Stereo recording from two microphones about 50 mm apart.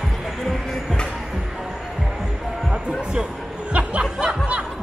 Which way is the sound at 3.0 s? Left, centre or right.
Centre.